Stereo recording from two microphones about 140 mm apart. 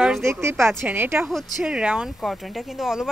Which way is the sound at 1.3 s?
Centre (ahead or behind).